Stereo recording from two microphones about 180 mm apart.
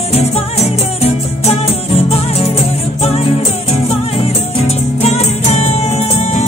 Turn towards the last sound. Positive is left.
turn(degrees=35)  # may be behind; listen again after turning